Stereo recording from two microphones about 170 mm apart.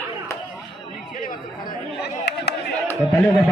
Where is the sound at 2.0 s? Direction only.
80° left.